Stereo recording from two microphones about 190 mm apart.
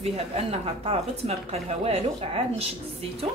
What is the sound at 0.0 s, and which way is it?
Speech, 30° right (ahead or behind).